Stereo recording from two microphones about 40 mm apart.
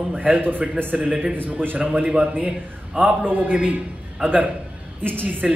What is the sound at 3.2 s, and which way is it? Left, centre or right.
A man's voice, right.